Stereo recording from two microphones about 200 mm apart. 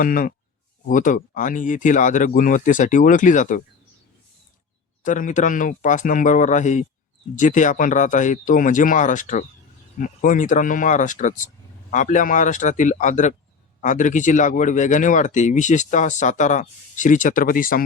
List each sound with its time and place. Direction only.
0.0 s speech: 45° left (ahead or behind)
5.0 s speech: 40° left (ahead or behind)